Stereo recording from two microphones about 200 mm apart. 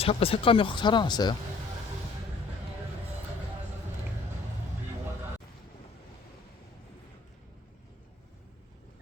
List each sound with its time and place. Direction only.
0.0 s speech: 30° left (ahead or behind)